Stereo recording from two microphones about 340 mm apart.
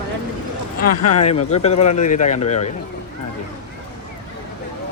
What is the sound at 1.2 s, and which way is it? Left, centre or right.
Speech, centre.